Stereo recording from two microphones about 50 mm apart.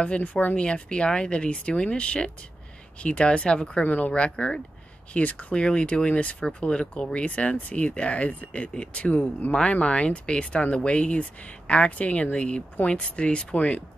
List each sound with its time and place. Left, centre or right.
0.0 s speech: left
0.6 s speech: left
3.8 s speech: left
4.1 s speech: left